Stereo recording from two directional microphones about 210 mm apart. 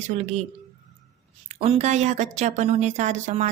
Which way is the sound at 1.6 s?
30° right (ahead or behind).